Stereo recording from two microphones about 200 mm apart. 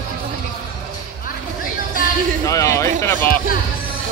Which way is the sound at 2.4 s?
15° left (ahead or behind).